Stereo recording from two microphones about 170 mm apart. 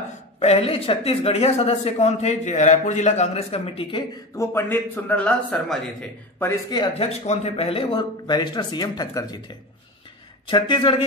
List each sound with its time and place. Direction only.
0.4 s speech: 35° left (ahead or behind)
4.4 s a man's voice: 15° left (ahead or behind)
6.4 s speech: 20° left (ahead or behind)
7.1 s speech: 40° left (ahead or behind); by 9.4 s 25° left (ahead or behind)
10.4 s speech: 30° left (ahead or behind)